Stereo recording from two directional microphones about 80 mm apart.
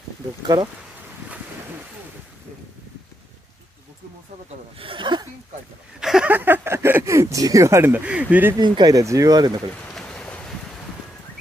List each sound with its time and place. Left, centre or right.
4.8 s speech: right
5.9 s speech: centre
6.2 s speech: right
7.8 s speech: centre
8.5 s speech: right
8.9 s speech: right
9.9 s vehicle: centre